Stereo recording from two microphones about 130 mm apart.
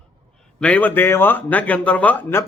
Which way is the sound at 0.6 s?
10° left (ahead or behind).